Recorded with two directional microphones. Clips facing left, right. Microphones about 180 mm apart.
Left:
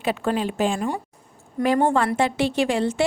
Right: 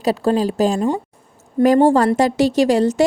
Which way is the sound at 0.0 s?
35° right (ahead or behind).